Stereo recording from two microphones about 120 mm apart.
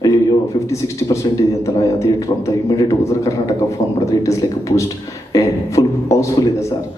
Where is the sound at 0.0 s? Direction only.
30° left (ahead or behind).